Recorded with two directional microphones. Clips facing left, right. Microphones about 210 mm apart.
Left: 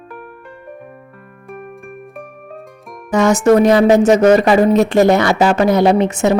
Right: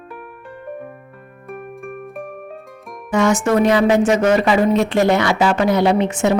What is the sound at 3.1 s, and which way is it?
Speech, 40° left (ahead or behind).